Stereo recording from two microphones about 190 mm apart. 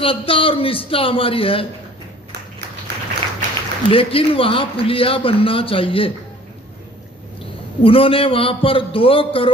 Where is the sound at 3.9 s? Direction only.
30° left (ahead or behind).